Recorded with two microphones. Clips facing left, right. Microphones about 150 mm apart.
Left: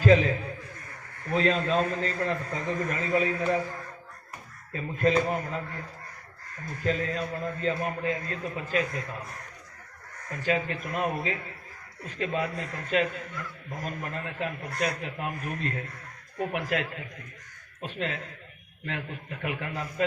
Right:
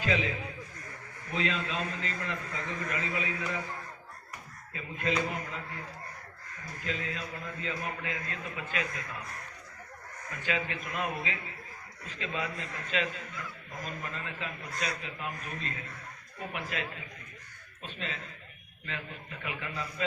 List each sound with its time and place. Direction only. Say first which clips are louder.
0.0 s a sound: left 10 dB; 40° left (ahead or behind)
1.3 s a man's voice: left 8 dB; 40° left (ahead or behind)
4.7 s a man's voice: left 8 dB; 40° left (ahead or behind)
6.8 s a man's voice: left 8 dB; 40° left (ahead or behind)
10.4 s a man's voice: left 6 dB; 40° left (ahead or behind)